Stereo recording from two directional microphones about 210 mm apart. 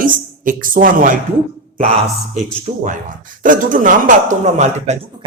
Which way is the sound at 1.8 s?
30° right (ahead or behind).